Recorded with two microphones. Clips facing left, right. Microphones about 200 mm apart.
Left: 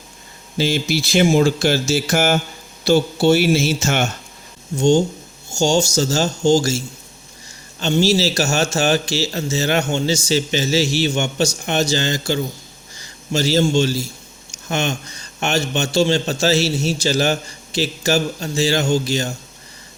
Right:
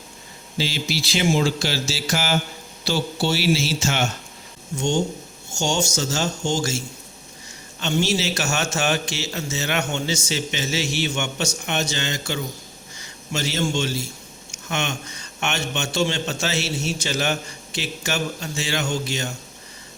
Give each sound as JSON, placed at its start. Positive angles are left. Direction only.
{"t": 0.5, "sound": "speech", "side_deg": 50}
{"t": 4.8, "sound": "a man's voice", "side_deg": 30}